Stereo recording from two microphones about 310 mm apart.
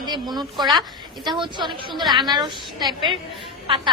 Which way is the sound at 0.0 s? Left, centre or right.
Centre.